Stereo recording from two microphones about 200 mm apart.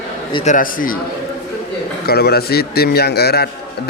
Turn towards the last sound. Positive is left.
turn(degrees=55)  # may be behind; listen again after turning